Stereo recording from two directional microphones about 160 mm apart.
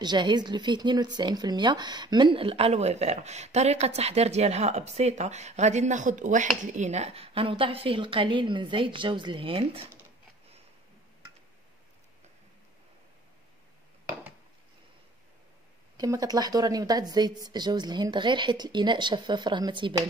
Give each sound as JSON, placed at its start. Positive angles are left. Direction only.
{"t": 0.0, "sound": "speech", "side_deg": -30}
{"t": 16.0, "sound": "speech", "side_deg": -25}